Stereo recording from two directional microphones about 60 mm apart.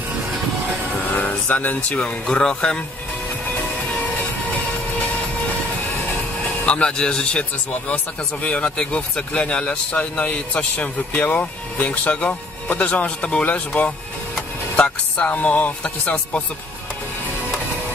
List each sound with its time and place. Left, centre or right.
1.1 s music: left
2.0 s speech: centre
6.4 s a man's voice: left